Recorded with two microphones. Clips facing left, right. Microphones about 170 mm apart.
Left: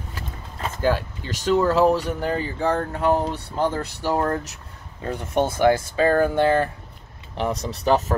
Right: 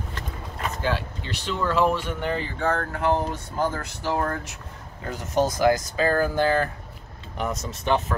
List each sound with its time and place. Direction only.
0.8 s speech: 45° left (ahead or behind); by 4.2 s 15° left (ahead or behind)
5.0 s speech: 30° left (ahead or behind)